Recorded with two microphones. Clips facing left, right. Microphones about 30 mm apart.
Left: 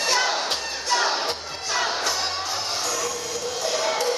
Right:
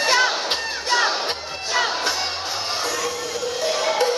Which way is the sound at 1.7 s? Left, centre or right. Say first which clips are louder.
Right 3 dB; right.